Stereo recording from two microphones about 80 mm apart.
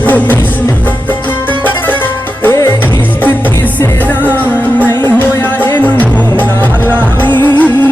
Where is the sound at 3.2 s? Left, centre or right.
Left.